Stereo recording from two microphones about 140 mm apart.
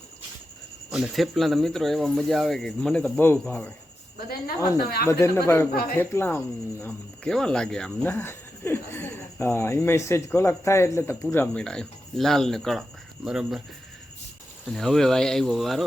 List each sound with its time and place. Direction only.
0.9 s speech: 5° right (ahead or behind)
4.3 s speech: 90° left
5.0 s speech: 20° left (ahead or behind)
5.7 s speech: 90° left
6.0 s speech: 15° left (ahead or behind)
6.8 s speech: 5° left (ahead or behind)
14.7 s speech: 5° left (ahead or behind)